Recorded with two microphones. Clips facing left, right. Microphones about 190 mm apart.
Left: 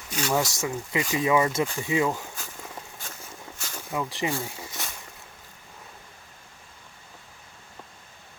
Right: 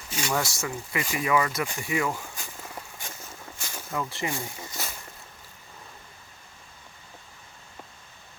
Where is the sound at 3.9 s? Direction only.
15° left (ahead or behind).